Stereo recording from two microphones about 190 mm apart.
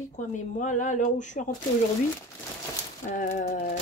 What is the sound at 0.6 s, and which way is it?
Speech, 40° left (ahead or behind).